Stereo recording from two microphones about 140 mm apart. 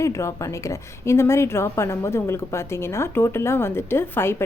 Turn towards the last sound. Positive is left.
turn(degrees=15)  # may be behind; listen again after turning